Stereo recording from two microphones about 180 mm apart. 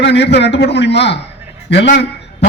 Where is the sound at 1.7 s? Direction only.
70° left (ahead or behind).